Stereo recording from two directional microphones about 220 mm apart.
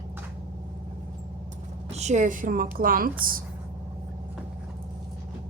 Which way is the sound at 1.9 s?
30° right (ahead or behind).